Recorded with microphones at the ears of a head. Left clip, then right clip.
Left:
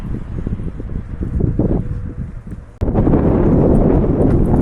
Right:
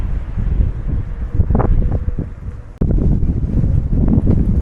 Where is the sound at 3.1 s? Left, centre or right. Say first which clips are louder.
Left 12 dB; left.